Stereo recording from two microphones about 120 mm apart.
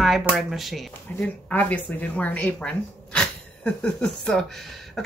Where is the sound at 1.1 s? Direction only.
15° left (ahead or behind).